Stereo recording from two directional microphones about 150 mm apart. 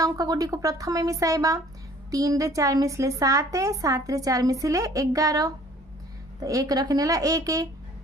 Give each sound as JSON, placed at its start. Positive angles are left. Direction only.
{"t": 0.0, "sound": "speech", "side_deg": -25}